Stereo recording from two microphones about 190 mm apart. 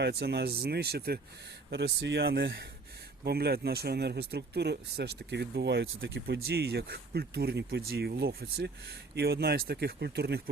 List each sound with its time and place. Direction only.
0.0 s speech: 55° right (ahead or behind)